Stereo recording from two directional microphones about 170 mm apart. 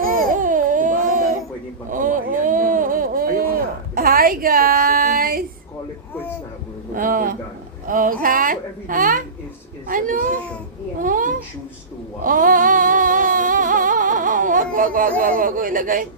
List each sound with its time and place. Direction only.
0.3 s baby cry: 50° right (ahead or behind)
1.9 s a sound: 50° right (ahead or behind)
6.9 s speech: 55° right (ahead or behind)
11.0 s a sound: 50° right (ahead or behind)
12.2 s music: 55° right (ahead or behind)
15.2 s speech: 55° right (ahead or behind)